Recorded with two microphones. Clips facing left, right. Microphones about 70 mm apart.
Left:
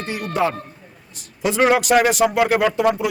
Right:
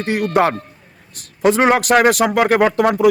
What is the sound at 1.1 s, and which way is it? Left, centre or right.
A man's voice, right.